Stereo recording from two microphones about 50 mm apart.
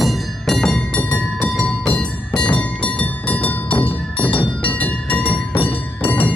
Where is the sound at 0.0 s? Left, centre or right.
Centre.